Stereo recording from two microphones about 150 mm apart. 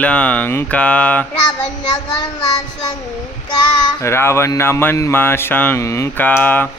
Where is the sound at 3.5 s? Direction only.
30° left (ahead or behind).